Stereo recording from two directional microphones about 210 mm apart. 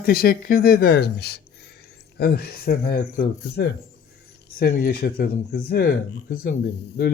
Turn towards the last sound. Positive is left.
turn(degrees=50)  # may be behind; listen again after turning